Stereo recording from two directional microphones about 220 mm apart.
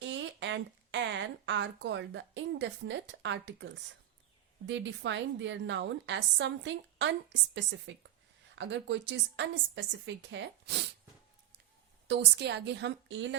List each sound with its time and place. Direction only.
0.0 s a woman's voice: 55° right (ahead or behind)
12.0 s a woman's voice: 50° right (ahead or behind)